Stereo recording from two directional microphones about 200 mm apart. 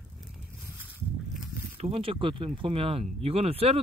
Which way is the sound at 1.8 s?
30° right (ahead or behind).